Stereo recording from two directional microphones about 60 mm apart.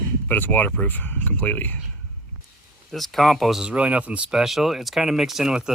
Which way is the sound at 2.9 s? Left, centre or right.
Centre.